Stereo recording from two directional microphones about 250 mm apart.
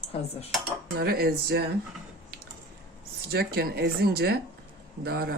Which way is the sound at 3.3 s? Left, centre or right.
Right.